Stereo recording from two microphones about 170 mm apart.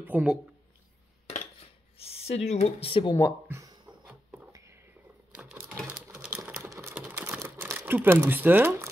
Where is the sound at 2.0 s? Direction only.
35° left (ahead or behind).